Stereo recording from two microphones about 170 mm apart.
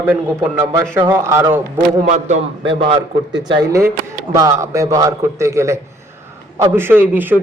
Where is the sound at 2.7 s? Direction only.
30° right (ahead or behind).